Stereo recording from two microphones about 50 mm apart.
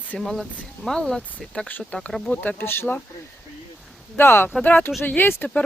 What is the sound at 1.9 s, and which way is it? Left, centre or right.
Speech, left.